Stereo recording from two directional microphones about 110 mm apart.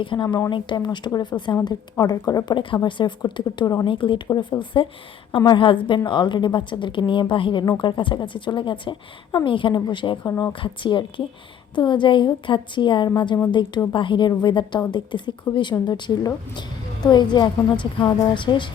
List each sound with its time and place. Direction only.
0.0 s a woman's voice: 45° left (ahead or behind)
10.2 s speech: 30° left (ahead or behind)
10.6 s a woman's voice: 50° left (ahead or behind)